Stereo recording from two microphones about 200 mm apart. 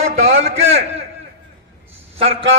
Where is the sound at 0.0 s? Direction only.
35° right (ahead or behind).